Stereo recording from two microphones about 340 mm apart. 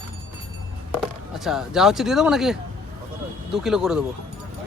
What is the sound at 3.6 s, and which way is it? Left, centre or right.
Speech, centre.